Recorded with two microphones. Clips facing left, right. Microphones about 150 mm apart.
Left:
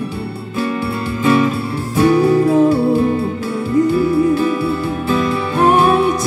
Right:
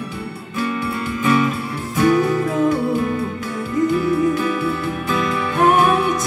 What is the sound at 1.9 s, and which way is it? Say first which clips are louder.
Music: left 4 dB; 30° left (ahead or behind).